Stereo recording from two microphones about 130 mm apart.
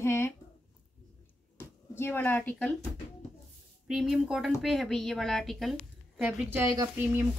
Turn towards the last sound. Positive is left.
turn(degrees=-20)  # may be behind; listen again after turning